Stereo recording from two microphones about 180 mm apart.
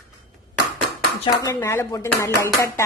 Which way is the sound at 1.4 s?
15° left (ahead or behind).